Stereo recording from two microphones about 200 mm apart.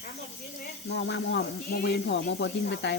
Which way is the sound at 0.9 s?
65° left (ahead or behind).